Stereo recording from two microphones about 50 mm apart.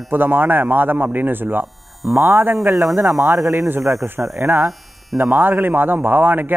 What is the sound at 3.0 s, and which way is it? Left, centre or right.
A man's voice, right.